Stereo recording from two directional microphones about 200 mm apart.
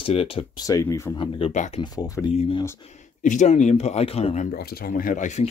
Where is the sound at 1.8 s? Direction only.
15° left (ahead or behind).